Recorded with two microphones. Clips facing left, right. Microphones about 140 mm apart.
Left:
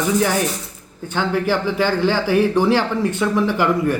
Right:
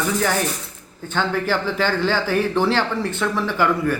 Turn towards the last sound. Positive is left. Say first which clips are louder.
# left 2 dB
turn(degrees=15)  # may be behind; listen again after turning